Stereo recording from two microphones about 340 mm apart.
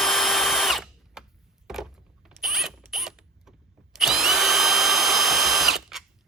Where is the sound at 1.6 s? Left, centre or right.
Centre.